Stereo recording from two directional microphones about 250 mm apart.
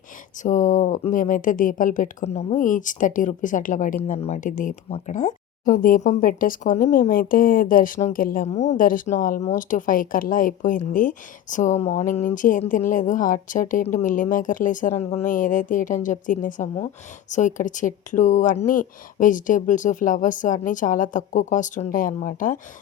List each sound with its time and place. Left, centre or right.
0.4 s speech: left